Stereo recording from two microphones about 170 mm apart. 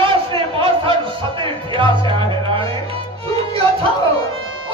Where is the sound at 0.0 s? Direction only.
30° right (ahead or behind).